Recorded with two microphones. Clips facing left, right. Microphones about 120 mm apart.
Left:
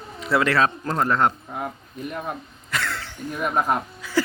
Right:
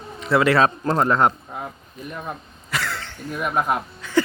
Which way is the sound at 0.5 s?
30° right (ahead or behind).